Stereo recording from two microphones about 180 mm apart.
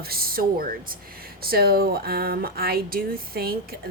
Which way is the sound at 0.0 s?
55° right (ahead or behind).